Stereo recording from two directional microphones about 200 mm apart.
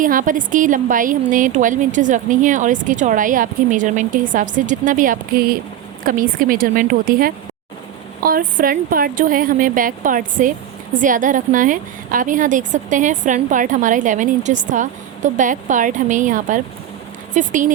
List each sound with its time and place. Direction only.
0.0 s a woman's voice: 40° right (ahead or behind)